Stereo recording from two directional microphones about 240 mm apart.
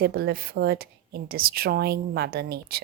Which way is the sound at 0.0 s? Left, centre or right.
Right.